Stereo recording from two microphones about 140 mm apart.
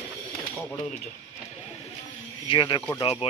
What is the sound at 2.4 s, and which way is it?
Speech, 35° left (ahead or behind).